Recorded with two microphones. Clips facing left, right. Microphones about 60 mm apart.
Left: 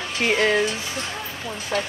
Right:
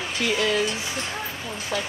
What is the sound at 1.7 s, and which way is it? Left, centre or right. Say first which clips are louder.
Speech: left 3 dB; left.